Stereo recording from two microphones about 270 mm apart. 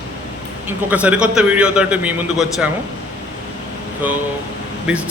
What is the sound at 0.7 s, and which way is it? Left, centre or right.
A man's voice, centre.